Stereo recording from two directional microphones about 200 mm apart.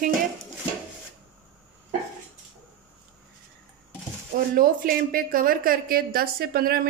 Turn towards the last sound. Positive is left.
turn(degrees=-50)  # may be behind; listen again after turning